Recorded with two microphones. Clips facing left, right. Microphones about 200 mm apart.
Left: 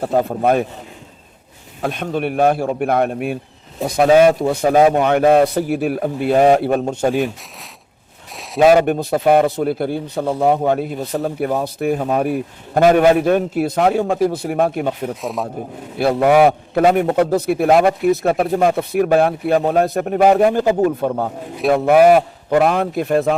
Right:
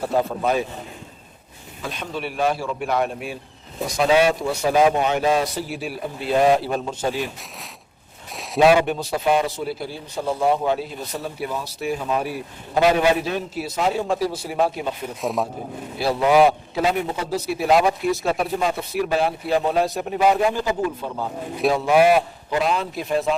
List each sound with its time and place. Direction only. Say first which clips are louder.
0.0 s a man's voice: left 5 dB; 55° left (ahead or behind)
1.8 s a man's voice: left 8 dB; 55° left (ahead or behind)
8.6 s a man's voice: left 4 dB; 45° left (ahead or behind)
15.1 s speech: even; centre (ahead or behind)
16.0 s a man's voice: left 4 dB; 55° left (ahead or behind)